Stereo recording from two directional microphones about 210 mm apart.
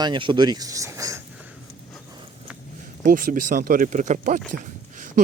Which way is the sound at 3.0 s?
40° right (ahead or behind).